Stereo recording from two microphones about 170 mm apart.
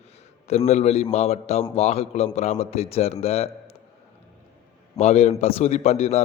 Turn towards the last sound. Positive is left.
turn(degrees=40)  # may be behind; listen again after turning